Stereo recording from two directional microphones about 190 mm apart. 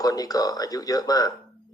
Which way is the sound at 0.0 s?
20° left (ahead or behind).